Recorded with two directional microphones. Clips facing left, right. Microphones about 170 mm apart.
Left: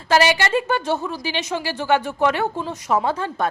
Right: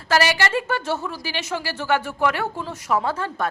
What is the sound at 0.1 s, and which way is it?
A woman's voice, 20° left (ahead or behind).